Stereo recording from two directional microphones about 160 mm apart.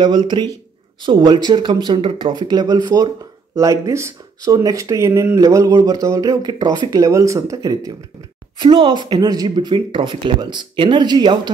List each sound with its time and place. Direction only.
0.0 s speech: 30° right (ahead or behind)
8.5 s speech: 30° right (ahead or behind)